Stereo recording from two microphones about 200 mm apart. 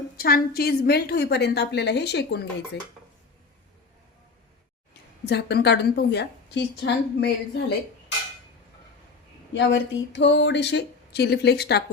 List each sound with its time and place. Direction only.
0.2 s a woman's voice: 50° left (ahead or behind)
5.2 s a woman's voice: 55° left (ahead or behind)
9.5 s a woman's voice: 65° left (ahead or behind)